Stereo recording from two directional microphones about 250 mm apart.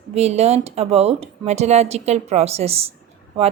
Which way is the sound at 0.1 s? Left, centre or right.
Right.